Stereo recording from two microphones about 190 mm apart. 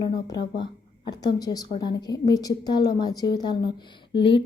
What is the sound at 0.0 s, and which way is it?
Speech, 20° left (ahead or behind).